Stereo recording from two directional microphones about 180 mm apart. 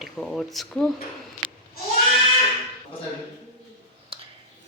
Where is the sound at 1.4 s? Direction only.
30° right (ahead or behind).